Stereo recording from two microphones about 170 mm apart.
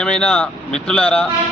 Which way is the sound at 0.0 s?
5° left (ahead or behind).